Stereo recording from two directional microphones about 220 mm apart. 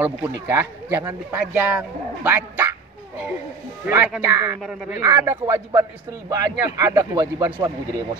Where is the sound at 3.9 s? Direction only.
5° right (ahead or behind).